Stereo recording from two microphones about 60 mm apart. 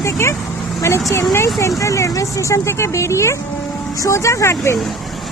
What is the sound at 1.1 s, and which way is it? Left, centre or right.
Speech, left.